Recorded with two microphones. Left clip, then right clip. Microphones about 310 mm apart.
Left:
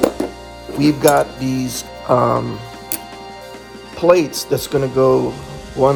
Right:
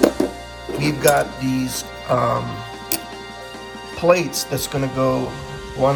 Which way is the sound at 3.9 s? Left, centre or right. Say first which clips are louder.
Left 3 dB; centre.